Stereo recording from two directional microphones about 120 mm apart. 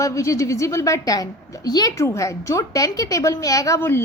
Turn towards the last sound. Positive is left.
turn(degrees=20)  # may be behind; listen again after turning